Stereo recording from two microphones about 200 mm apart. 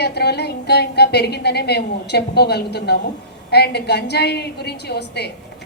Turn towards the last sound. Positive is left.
turn(degrees=55)  # may be behind; listen again after turning